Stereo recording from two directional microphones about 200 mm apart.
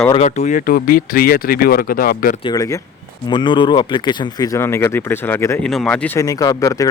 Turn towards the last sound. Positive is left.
turn(degrees=15)  # may be behind; listen again after turning